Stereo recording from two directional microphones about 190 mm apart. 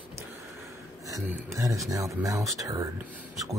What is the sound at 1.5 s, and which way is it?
Speech, 15° right (ahead or behind).